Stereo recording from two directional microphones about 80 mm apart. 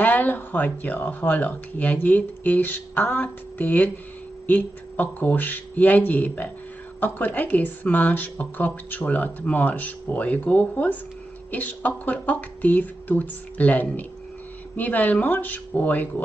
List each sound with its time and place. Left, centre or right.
0.0 s speech: left